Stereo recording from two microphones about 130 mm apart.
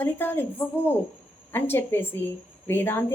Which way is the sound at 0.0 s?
15° left (ahead or behind).